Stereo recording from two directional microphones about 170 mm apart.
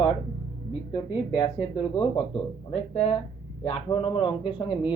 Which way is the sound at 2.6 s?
35° left (ahead or behind).